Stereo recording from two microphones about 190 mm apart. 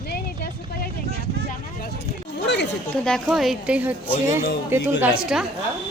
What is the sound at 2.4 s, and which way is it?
Speech, 65° left (ahead or behind).